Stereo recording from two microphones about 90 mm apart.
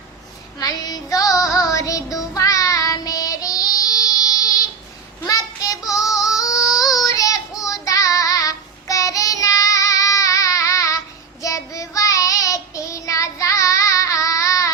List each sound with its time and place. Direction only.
0.6 s child singing: 45° left (ahead or behind)
6.3 s yodeling: 40° left (ahead or behind)
6.7 s child singing: 45° left (ahead or behind)